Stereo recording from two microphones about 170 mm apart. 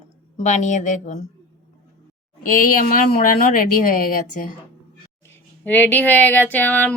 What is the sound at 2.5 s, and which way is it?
Speech, 55° left (ahead or behind).